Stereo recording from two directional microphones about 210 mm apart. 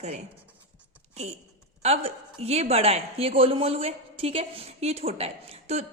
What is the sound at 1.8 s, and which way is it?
A woman's voice, 30° right (ahead or behind).